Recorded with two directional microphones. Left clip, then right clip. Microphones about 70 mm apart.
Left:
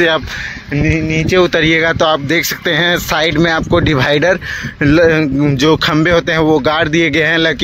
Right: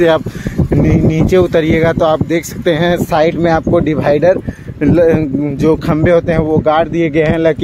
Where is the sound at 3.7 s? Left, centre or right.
Left.